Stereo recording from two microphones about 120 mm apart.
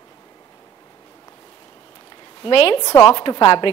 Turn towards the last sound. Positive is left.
turn(degrees=45)  # may be behind; listen again after turning